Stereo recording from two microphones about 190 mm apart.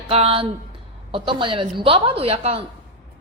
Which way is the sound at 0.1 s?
30° right (ahead or behind).